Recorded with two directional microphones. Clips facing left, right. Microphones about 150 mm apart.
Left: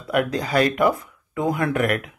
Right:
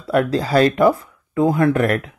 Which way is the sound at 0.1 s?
30° right (ahead or behind).